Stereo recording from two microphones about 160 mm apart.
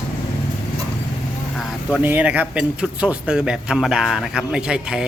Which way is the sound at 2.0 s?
10° right (ahead or behind).